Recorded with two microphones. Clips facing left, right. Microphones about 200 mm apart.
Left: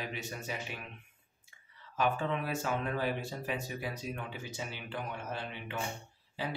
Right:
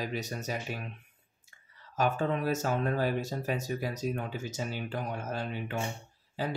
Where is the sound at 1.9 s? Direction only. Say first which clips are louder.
Right 3 dB; 40° right (ahead or behind).